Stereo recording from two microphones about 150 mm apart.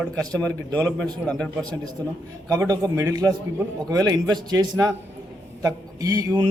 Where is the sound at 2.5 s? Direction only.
25° right (ahead or behind).